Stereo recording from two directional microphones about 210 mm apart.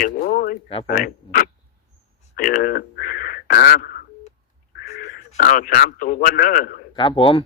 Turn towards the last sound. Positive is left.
turn(degrees=25)  # may be behind; listen again after turning